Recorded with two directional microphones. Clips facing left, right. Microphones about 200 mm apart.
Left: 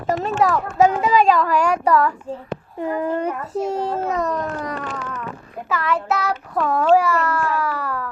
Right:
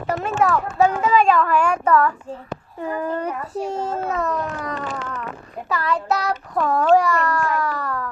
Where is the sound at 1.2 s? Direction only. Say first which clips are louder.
Left 1 dB; 35° left (ahead or behind).